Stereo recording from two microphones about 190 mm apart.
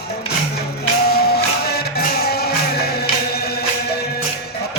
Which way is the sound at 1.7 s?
55° left (ahead or behind).